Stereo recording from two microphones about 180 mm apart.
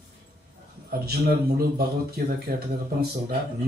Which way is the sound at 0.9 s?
55° right (ahead or behind).